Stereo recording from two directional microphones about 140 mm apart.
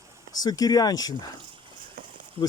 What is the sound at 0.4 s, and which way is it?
Speech, 25° left (ahead or behind).